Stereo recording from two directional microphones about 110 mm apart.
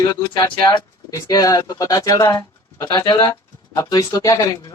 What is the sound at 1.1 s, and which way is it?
Speech, 30° left (ahead or behind).